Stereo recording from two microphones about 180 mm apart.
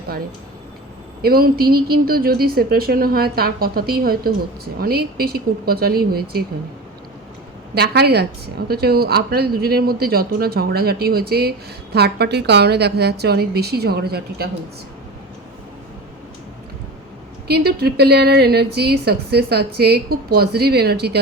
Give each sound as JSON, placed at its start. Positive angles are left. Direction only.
{"t": 1.2, "sound": "a woman's voice", "side_deg": -55}
{"t": 7.8, "sound": "a woman's voice", "side_deg": -65}
{"t": 17.5, "sound": "a woman's voice", "side_deg": -60}